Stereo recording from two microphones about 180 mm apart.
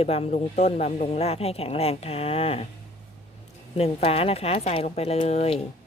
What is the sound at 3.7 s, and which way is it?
Speech, 35° left (ahead or behind).